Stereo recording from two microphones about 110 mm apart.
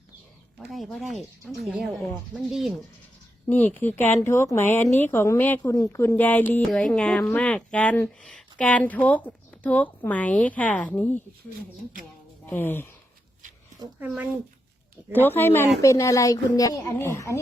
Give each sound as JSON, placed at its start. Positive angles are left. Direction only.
{"t": 0.7, "sound": "speech", "side_deg": 0}
{"t": 3.4, "sound": "speech", "side_deg": 15}
{"t": 12.5, "sound": "speech", "side_deg": 20}
{"t": 14.1, "sound": "speech", "side_deg": 0}
{"t": 15.1, "sound": "speech", "side_deg": 20}